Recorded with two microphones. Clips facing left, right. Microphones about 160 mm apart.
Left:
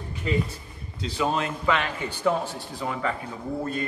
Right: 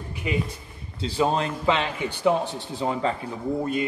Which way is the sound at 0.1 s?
10° right (ahead or behind).